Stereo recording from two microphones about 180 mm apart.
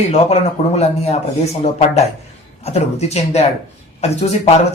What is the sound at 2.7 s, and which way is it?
Speech, 35° left (ahead or behind).